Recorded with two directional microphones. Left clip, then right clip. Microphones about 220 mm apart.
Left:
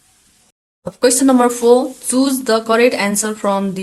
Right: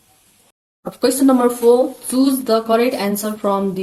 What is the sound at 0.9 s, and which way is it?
Speech, 45° left (ahead or behind).